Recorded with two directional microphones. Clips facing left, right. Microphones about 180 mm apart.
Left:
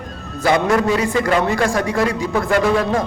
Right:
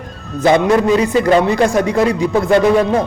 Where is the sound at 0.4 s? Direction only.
20° right (ahead or behind).